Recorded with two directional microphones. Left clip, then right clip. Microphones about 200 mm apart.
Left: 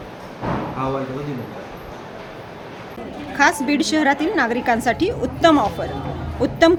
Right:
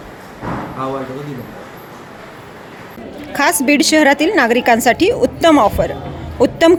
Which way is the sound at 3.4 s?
40° right (ahead or behind).